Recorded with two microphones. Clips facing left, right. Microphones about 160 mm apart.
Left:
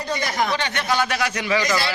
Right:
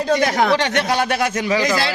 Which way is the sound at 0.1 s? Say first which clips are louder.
Right 7 dB; 70° right (ahead or behind).